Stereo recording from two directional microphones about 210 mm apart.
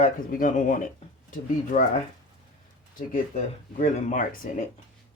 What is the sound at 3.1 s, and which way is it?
Speech, 35° left (ahead or behind).